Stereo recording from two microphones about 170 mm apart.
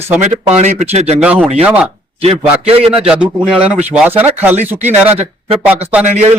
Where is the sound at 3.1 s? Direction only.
5° right (ahead or behind).